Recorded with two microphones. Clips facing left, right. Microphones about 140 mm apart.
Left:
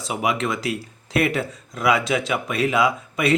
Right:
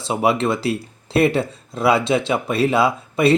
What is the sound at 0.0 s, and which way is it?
Speech, 30° right (ahead or behind).